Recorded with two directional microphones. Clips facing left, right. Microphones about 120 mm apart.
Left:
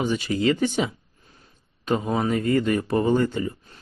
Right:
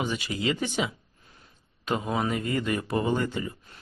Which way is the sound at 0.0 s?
40° left (ahead or behind).